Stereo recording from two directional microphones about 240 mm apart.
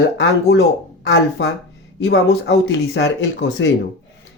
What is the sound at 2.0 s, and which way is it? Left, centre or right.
Speech, left.